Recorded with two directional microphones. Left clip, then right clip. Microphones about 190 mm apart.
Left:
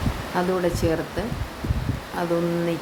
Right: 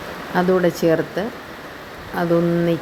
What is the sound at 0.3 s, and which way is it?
Speech, 20° right (ahead or behind).